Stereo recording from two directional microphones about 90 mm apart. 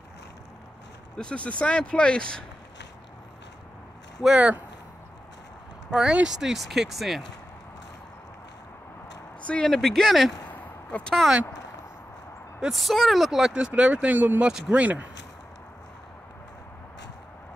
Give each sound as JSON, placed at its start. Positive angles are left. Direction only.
{"t": 1.1, "sound": "speech", "side_deg": 10}
{"t": 4.2, "sound": "speech", "side_deg": -10}
{"t": 5.9, "sound": "speech", "side_deg": -5}
{"t": 9.4, "sound": "speech", "side_deg": 10}
{"t": 10.5, "sound": "a sound", "side_deg": 15}
{"t": 12.5, "sound": "speech", "side_deg": -5}